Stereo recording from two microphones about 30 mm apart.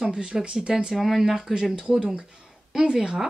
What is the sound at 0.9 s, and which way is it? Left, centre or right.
Speech, centre.